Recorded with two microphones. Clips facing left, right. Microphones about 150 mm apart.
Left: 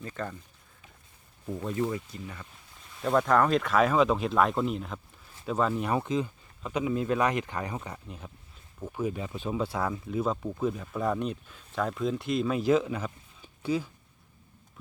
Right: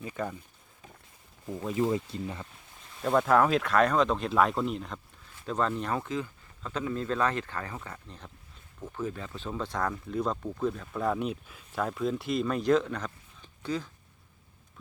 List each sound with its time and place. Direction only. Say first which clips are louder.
0.0 s speech: right 2 dB; 10° right (ahead or behind)
1.7 s speech: right 4 dB; 20° right (ahead or behind)
3.0 s speech: even; centre (ahead or behind)
6.0 s speech: left 4 dB; 20° left (ahead or behind)